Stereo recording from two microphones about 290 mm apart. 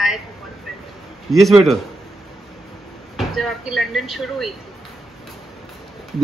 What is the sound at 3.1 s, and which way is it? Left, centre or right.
Speech, centre.